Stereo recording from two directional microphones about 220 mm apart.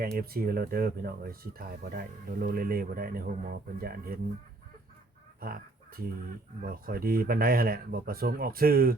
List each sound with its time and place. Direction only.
0.2 s speech: 45° right (ahead or behind)
5.4 s speech: 40° right (ahead or behind)